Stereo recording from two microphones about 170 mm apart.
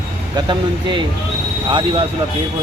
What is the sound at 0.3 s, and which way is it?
Speech, 30° right (ahead or behind).